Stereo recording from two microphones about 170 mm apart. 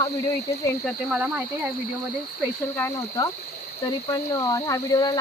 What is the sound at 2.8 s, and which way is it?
Speech, 15° left (ahead or behind).